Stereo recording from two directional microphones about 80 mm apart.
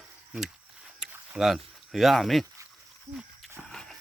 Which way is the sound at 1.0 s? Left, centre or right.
Centre.